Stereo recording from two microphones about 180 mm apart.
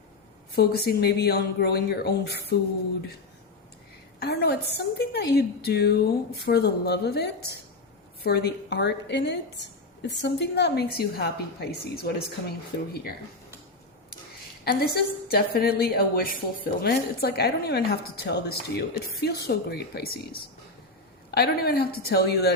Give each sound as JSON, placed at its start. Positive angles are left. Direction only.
{"t": 0.5, "sound": "a woman's voice", "side_deg": 60}
{"t": 4.2, "sound": "a woman's voice", "side_deg": 60}
{"t": 14.6, "sound": "a woman's voice", "side_deg": 60}
{"t": 21.2, "sound": "a woman's voice", "side_deg": 60}